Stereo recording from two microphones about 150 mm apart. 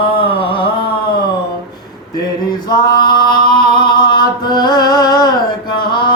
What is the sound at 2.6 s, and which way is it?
Male singing, 30° left (ahead or behind).